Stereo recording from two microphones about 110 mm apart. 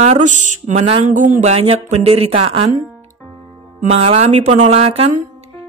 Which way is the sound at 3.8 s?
70° right (ahead or behind).